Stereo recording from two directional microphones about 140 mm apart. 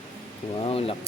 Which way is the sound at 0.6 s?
45° left (ahead or behind).